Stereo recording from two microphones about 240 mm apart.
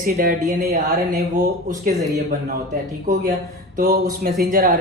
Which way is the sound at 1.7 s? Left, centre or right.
Right.